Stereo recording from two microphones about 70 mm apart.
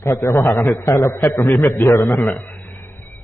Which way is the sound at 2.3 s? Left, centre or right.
Left.